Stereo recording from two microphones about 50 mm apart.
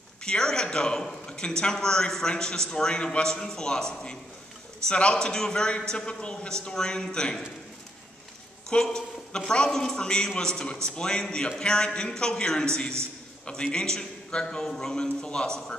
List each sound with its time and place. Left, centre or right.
0.2 s a man's voice: centre
8.6 s a man's voice: centre